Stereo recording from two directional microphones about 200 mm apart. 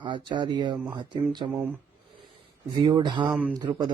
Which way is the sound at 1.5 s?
10° right (ahead or behind).